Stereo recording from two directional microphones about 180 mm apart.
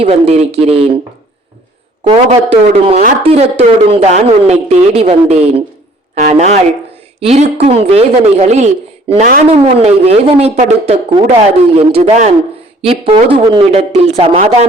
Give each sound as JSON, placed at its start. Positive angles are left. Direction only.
{"t": 0.0, "sound": "a man's voice", "side_deg": -35}
{"t": 2.0, "sound": "a man's voice", "side_deg": -30}